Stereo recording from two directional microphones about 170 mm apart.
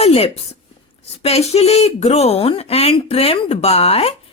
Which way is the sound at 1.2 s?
40° left (ahead or behind).